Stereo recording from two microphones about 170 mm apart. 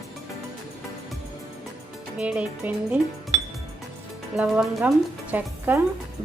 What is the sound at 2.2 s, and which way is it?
Speech, 5° right (ahead or behind).